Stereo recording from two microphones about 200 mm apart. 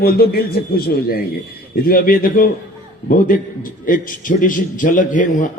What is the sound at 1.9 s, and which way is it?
A man's voice, 45° left (ahead or behind).